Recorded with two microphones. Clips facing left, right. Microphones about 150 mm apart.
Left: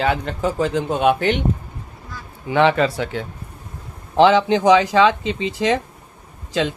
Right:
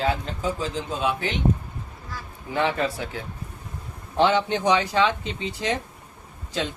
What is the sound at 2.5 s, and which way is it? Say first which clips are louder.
Speech: left 8 dB; 90° left.